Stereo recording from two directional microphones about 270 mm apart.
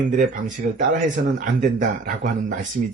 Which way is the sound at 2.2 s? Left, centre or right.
Right.